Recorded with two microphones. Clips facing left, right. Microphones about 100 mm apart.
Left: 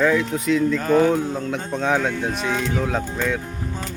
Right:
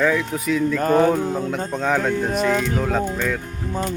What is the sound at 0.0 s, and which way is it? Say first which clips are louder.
Speech: left 1 dB; centre (ahead or behind).